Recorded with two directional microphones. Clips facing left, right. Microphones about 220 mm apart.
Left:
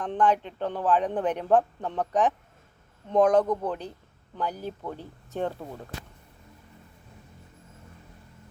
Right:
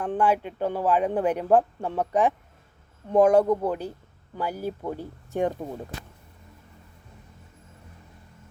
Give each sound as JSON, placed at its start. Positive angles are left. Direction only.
{"t": 0.0, "sound": "a man's voice", "side_deg": -10}